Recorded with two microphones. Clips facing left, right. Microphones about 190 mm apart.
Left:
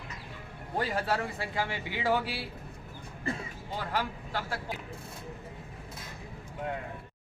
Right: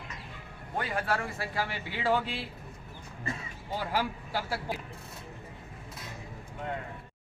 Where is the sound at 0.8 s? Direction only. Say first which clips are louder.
Left 1 dB; 25° left (ahead or behind); by 2.4 s 10° left (ahead or behind).